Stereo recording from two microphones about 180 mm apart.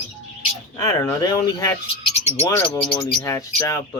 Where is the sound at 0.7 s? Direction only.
15° left (ahead or behind).